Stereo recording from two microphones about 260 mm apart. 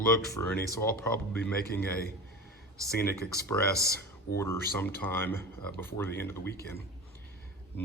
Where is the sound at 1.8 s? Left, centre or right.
Left.